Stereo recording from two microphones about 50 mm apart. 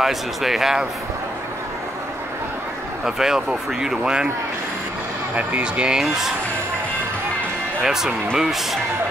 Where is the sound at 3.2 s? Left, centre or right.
Centre.